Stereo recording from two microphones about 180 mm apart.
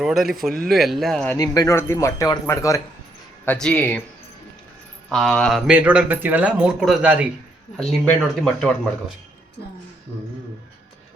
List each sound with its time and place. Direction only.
0.0 s speech: centre (ahead or behind)
1.4 s speech: 20° left (ahead or behind)
3.4 s speech: 5° left (ahead or behind)
5.0 s speech: centre (ahead or behind)